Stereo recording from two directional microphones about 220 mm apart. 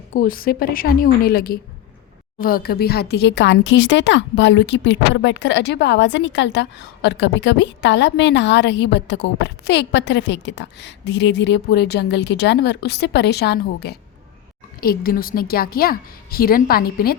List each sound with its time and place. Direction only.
0.1 s a woman's voice: 40° left (ahead or behind)